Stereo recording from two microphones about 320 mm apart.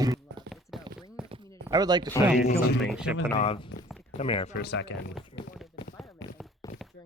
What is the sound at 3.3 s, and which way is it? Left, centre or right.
Speech, centre.